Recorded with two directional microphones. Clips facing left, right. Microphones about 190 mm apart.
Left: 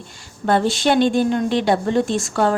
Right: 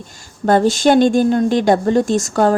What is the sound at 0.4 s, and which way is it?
A woman's voice, 40° right (ahead or behind).